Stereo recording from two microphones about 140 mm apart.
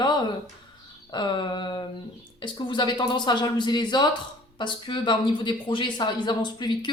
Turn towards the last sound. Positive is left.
turn(degrees=30)  # may be behind; listen again after turning